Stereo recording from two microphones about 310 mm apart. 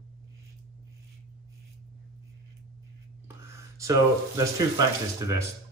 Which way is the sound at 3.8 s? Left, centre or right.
Centre.